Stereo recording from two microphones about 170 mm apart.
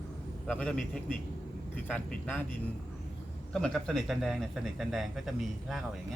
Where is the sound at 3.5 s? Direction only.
5° left (ahead or behind).